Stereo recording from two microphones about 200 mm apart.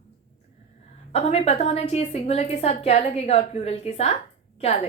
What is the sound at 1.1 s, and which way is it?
A woman's voice, 30° left (ahead or behind).